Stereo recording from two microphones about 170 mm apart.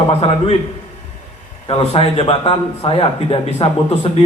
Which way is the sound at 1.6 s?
35° left (ahead or behind).